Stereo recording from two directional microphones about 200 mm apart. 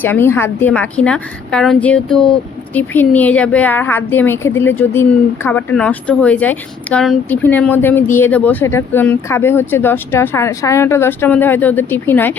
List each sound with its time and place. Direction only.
0.0 s a woman's voice: 10° left (ahead or behind)